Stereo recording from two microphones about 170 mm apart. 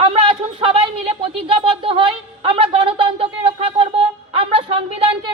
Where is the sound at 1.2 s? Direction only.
35° right (ahead or behind).